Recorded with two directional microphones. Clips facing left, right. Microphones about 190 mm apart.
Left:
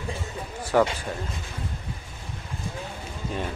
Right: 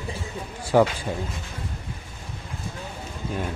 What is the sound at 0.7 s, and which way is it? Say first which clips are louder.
Speech: right 3 dB; 15° right (ahead or behind).